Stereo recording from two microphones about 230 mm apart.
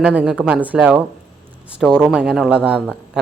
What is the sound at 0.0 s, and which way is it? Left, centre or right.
A man's voice, centre.